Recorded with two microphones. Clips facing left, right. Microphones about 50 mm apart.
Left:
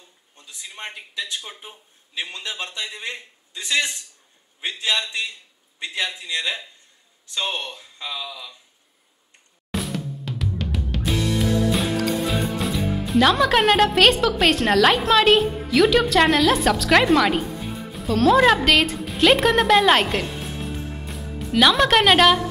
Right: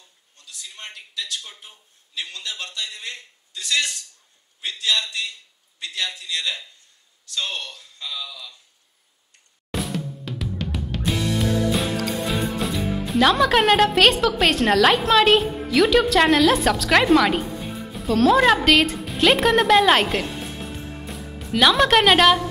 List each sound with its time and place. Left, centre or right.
0.4 s a man's voice: left
9.7 s music: centre